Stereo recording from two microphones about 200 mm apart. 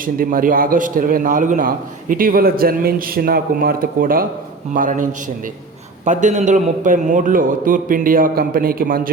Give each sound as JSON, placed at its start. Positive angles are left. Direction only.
{"t": 0.0, "sound": "a man's voice", "side_deg": -45}
{"t": 6.1, "sound": "a man's voice", "side_deg": -35}